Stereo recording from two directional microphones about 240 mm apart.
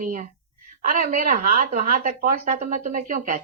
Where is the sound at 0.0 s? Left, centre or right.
Right.